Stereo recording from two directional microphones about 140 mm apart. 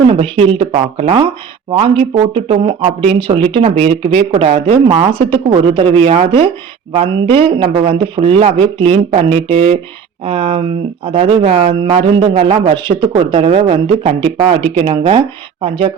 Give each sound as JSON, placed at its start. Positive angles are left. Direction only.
{"t": 0.1, "sound": "speech", "side_deg": -40}